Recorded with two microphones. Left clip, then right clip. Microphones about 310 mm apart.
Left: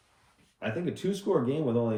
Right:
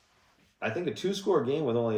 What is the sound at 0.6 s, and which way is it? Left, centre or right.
Speech, centre.